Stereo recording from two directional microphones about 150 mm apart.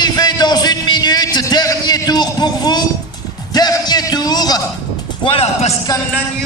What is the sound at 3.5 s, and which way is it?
Music, 25° left (ahead or behind).